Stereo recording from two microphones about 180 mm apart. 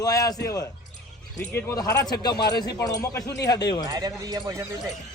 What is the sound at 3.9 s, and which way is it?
Speech, 20° right (ahead or behind).